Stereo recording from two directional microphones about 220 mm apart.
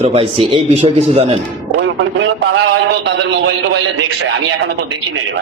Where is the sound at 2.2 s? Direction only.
55° right (ahead or behind).